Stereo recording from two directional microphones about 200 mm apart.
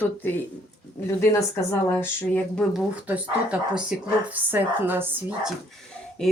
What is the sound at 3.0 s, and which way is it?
Speech, 5° right (ahead or behind).